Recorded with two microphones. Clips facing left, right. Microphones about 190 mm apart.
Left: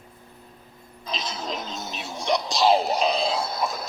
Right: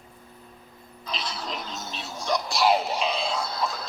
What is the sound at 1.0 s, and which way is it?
Music, 20° left (ahead or behind).